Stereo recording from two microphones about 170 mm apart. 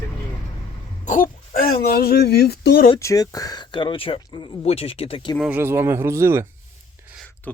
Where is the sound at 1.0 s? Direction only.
50° left (ahead or behind).